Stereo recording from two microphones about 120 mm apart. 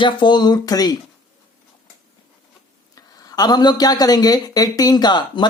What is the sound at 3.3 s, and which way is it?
Speech, 35° left (ahead or behind).